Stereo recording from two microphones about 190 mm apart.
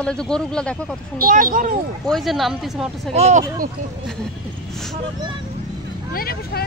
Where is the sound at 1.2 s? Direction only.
45° right (ahead or behind).